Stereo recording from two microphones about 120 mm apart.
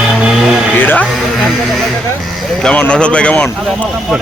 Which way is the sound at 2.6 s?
10° left (ahead or behind).